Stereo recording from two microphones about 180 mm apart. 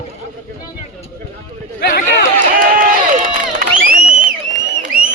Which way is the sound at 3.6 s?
45° right (ahead or behind).